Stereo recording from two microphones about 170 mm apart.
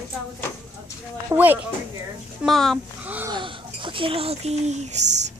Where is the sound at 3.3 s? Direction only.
30° right (ahead or behind).